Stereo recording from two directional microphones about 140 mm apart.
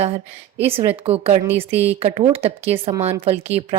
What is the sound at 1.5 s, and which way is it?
Speech, 15° right (ahead or behind).